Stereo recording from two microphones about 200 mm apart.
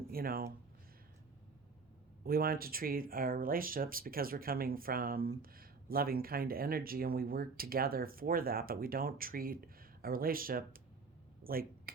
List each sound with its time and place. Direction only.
0.1 s speech: 50° right (ahead or behind)
2.2 s speech: 50° right (ahead or behind)